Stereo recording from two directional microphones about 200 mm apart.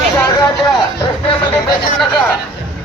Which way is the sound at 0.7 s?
20° left (ahead or behind).